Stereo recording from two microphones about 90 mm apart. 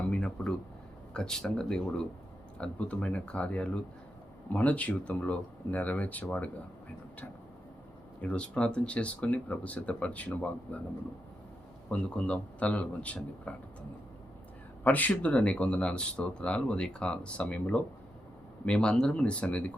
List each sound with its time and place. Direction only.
0.1 s speech: 10° left (ahead or behind)
8.2 s speech: 10° left (ahead or behind)
11.9 s speech: 15° left (ahead or behind)
14.8 s speech: 20° left (ahead or behind)